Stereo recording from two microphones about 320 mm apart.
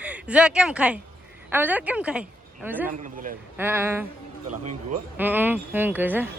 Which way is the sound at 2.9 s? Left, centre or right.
Right.